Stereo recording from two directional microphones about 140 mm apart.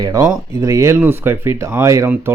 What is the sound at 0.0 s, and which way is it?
Speech, 25° right (ahead or behind).